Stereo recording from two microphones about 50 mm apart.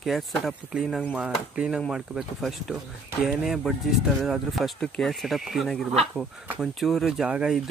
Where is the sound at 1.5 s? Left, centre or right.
Centre.